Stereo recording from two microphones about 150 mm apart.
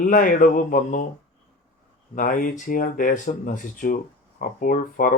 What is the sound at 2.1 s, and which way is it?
Speech, 65° left (ahead or behind).